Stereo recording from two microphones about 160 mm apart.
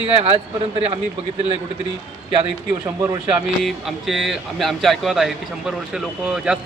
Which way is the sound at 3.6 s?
Centre (ahead or behind).